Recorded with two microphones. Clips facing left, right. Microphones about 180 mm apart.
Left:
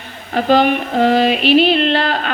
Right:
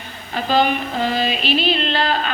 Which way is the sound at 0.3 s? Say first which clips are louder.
Left 5 dB; 60° left (ahead or behind).